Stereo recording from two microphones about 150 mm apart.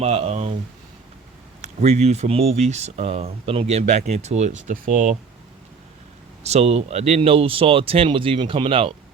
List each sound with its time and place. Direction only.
0.0 s speech: 45° right (ahead or behind)
1.6 s speech: 45° right (ahead or behind)
6.4 s speech: 45° right (ahead or behind)